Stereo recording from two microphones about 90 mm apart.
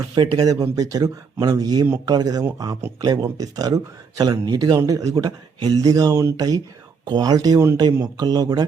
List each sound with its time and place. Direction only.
0.1 s speech: 45° right (ahead or behind)
4.8 s speech: 40° right (ahead or behind)